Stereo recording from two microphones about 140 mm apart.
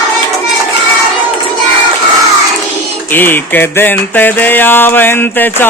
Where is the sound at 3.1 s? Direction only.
15° left (ahead or behind).